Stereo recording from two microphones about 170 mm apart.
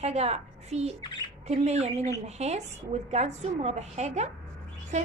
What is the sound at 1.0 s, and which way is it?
Speech, 25° left (ahead or behind).